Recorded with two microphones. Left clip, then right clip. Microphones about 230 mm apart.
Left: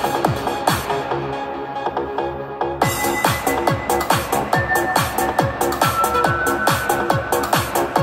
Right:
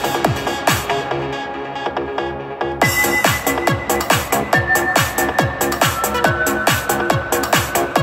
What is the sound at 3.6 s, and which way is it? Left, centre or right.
Music, right.